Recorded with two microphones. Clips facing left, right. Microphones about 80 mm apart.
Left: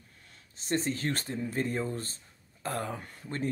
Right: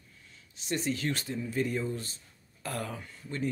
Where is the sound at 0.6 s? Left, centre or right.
Left.